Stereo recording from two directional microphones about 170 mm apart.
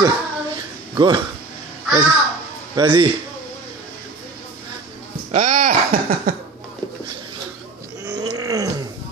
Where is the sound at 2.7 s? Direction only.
25° right (ahead or behind).